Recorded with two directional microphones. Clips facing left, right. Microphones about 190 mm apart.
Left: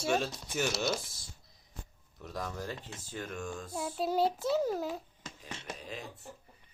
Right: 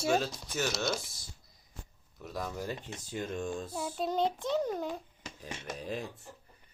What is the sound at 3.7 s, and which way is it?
Speech, centre (ahead or behind).